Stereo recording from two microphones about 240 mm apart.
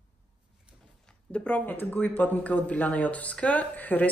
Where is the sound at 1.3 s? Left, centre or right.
Centre.